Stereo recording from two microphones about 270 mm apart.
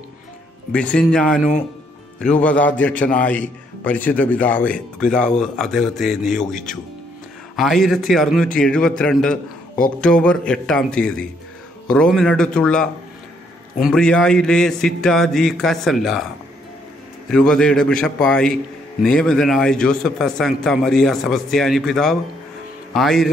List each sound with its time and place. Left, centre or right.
0.7 s a man's voice: centre
17.3 s a man's voice: centre